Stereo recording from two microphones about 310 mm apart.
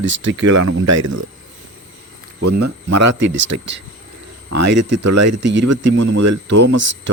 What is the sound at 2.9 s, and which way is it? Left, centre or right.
Speech, right.